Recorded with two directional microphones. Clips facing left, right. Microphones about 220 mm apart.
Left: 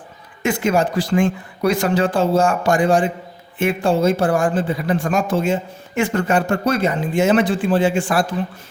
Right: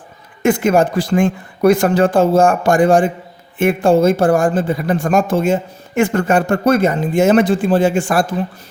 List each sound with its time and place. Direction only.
0.4 s speech: 50° right (ahead or behind)